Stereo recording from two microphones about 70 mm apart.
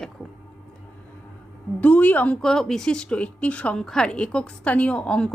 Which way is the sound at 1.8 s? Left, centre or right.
Left.